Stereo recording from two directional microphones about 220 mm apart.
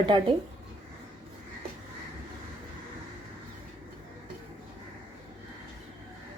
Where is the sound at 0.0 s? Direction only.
20° right (ahead or behind).